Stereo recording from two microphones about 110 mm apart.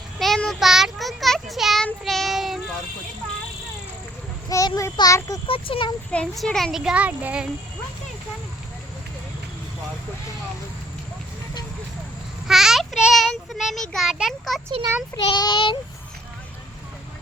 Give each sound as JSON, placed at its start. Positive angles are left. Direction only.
{"t": 0.2, "sound": "child singing", "side_deg": 5}
{"t": 4.4, "sound": "a child's voice", "side_deg": 35}
{"t": 5.5, "sound": "speech", "side_deg": 55}
{"t": 6.1, "sound": "a child's voice", "side_deg": 5}
{"t": 12.5, "sound": "child singing", "side_deg": -5}
{"t": 13.0, "sound": "a child's voice", "side_deg": -5}
{"t": 15.1, "sound": "child singing", "side_deg": 45}